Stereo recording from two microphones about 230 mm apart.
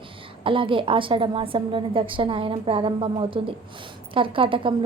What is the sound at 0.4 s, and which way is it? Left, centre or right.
A woman's voice, right.